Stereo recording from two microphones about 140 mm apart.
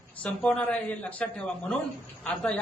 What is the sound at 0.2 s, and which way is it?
A man's voice, 10° left (ahead or behind).